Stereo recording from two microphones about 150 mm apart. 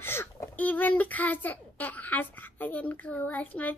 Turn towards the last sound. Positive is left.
turn(degrees=10)  # may be behind; listen again after turning